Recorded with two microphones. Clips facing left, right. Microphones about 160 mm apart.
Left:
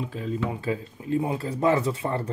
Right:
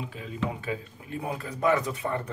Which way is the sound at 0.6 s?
30° left (ahead or behind).